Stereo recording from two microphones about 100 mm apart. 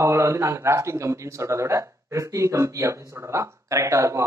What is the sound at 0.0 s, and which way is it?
A man's voice, 30° right (ahead or behind).